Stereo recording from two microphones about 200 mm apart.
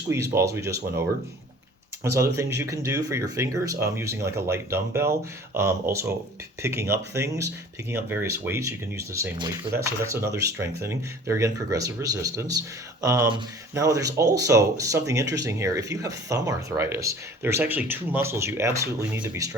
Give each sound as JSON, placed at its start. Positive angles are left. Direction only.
{"t": 0.1, "sound": "speech", "side_deg": -15}
{"t": 2.0, "sound": "speech", "side_deg": -15}